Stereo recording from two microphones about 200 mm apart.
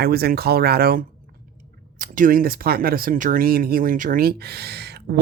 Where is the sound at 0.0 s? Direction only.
50° right (ahead or behind).